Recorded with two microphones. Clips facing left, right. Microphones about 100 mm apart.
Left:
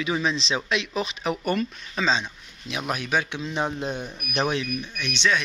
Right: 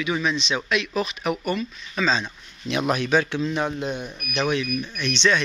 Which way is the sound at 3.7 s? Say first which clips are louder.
Right 1 dB; 30° left (ahead or behind).